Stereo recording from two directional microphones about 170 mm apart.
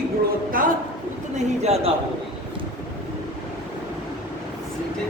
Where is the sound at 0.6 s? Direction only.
55° right (ahead or behind).